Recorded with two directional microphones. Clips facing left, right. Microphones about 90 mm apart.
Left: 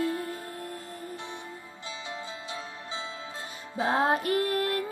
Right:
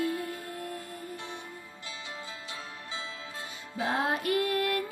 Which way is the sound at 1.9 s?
25° left (ahead or behind).